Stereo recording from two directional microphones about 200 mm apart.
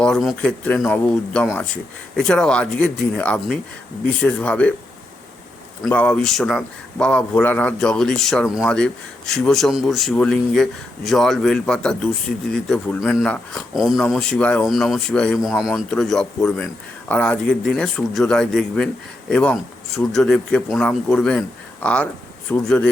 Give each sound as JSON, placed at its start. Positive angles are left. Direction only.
{"t": 0.0, "sound": "a man's voice", "side_deg": 0}
{"t": 5.8, "sound": "a man's voice", "side_deg": 5}